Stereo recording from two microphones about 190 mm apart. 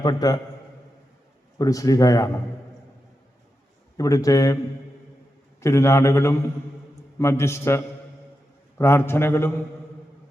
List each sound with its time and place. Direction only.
0.0 s a man's voice: 20° left (ahead or behind)
1.5 s a man's voice: 20° left (ahead or behind)
3.9 s a man's voice: 15° left (ahead or behind)
5.5 s a man's voice: 15° left (ahead or behind)
8.8 s a man's voice: 15° left (ahead or behind)